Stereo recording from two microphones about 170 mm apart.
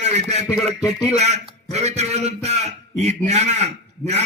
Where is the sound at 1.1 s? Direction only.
40° right (ahead or behind).